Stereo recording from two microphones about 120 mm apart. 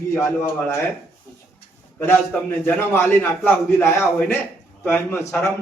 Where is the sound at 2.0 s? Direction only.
15° left (ahead or behind).